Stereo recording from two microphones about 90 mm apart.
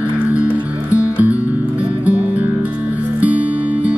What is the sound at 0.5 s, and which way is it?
Music, 15° right (ahead or behind).